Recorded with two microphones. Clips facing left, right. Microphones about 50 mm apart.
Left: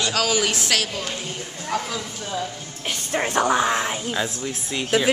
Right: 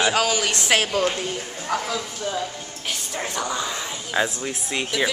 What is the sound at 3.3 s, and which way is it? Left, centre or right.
Speech, left.